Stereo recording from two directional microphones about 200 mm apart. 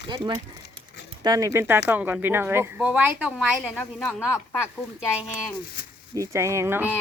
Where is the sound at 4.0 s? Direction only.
10° left (ahead or behind).